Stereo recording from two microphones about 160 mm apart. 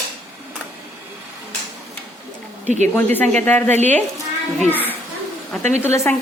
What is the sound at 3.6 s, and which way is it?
Speech, 45° right (ahead or behind).